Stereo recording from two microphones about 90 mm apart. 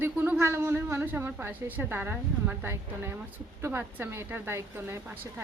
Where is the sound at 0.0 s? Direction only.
20° right (ahead or behind).